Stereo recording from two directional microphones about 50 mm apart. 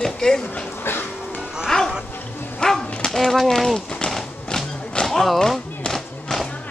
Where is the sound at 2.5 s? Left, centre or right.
Centre.